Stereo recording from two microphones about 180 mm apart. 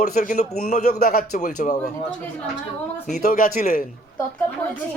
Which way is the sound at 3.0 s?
50° left (ahead or behind).